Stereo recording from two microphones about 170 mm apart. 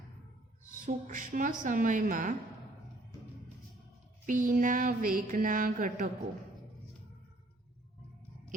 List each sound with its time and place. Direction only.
0.9 s mantra: 50° right (ahead or behind)
4.3 s mantra: 50° right (ahead or behind)